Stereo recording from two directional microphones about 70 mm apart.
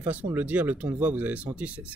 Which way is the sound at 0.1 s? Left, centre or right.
Right.